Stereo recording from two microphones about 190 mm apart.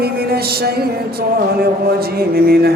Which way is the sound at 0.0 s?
55° right (ahead or behind).